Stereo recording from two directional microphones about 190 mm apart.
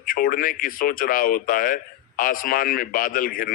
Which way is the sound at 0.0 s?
50° left (ahead or behind).